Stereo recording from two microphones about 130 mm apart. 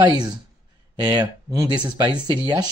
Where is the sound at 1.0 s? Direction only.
35° right (ahead or behind).